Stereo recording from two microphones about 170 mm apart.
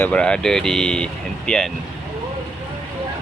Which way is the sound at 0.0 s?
5° left (ahead or behind).